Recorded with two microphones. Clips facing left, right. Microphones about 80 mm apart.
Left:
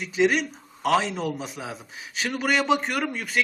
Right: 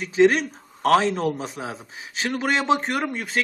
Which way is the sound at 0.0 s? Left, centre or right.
Right.